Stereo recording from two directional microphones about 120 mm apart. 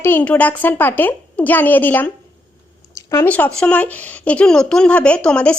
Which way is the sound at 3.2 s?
15° left (ahead or behind).